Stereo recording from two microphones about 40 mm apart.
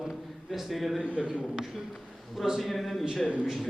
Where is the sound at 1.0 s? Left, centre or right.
Right.